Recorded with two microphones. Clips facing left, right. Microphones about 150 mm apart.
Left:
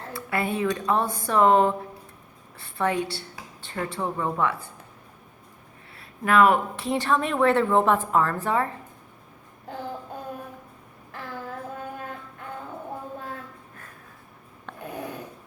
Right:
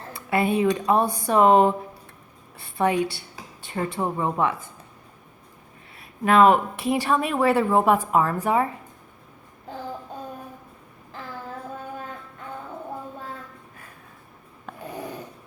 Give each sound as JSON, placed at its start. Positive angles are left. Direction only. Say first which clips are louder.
{"t": 0.1, "sound": "a woman's voice", "louder": "right 5 dB", "side_deg": -15}
{"t": 6.0, "sound": "speech", "louder": "right 2 dB", "side_deg": -20}
{"t": 14.7, "sound": "a sound", "louder": "right 1 dB", "side_deg": -5}